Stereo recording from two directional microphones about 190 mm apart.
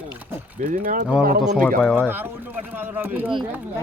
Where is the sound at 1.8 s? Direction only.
5° left (ahead or behind).